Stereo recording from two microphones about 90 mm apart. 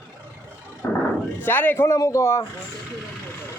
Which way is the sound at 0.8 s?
25° left (ahead or behind).